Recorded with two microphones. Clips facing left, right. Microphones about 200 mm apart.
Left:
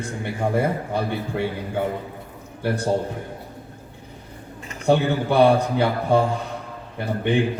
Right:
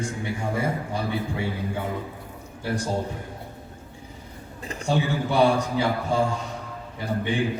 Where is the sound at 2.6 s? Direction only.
60° left (ahead or behind).